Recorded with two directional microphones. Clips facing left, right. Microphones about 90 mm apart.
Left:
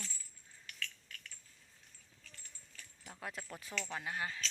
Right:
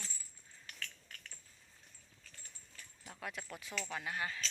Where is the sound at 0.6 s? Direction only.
35° right (ahead or behind).